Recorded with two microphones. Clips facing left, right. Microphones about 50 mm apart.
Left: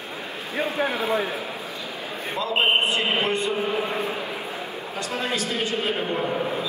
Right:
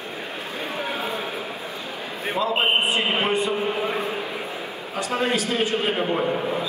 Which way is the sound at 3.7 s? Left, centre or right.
Right.